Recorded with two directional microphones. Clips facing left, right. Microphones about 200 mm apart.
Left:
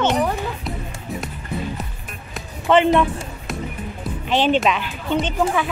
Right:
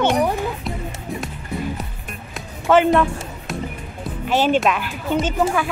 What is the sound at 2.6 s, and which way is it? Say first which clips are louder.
Speech: even; centre (ahead or behind).